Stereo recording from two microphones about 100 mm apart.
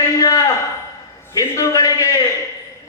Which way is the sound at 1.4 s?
30° left (ahead or behind).